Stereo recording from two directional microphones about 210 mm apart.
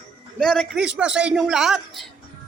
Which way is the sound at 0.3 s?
5° left (ahead or behind).